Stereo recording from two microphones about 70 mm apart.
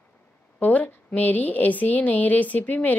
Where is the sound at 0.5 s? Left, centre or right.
Left.